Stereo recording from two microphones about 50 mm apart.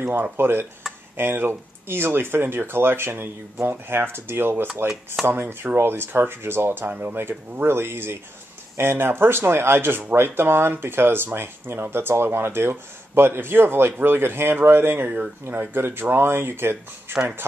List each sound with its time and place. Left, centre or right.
0.0 s speech: right
7.0 s speech: right